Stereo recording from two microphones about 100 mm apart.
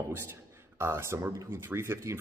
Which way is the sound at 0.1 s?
25° right (ahead or behind).